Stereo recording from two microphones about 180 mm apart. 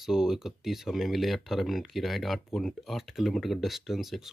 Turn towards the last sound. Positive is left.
turn(degrees=0)  # may be behind; listen again after turning